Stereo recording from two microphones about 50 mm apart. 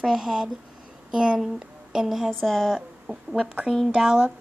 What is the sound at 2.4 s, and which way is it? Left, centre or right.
Speech, centre.